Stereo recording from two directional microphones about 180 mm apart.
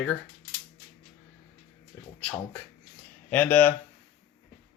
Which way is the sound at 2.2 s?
5° left (ahead or behind).